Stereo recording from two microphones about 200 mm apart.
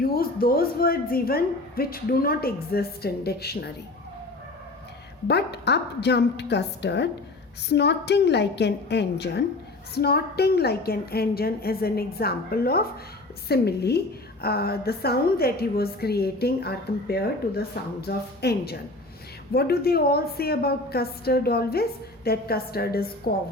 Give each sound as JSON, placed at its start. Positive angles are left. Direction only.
{"t": 0.0, "sound": "a woman's voice", "side_deg": 50}
{"t": 5.3, "sound": "a woman's voice", "side_deg": 55}